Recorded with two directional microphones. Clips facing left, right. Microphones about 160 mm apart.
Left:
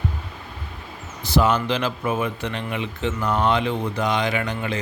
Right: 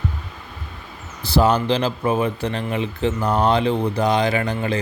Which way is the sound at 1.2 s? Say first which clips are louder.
Right 2 dB; 35° right (ahead or behind).